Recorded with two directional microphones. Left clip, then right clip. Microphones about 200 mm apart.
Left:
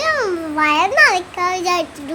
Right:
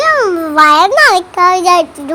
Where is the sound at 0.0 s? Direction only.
20° right (ahead or behind).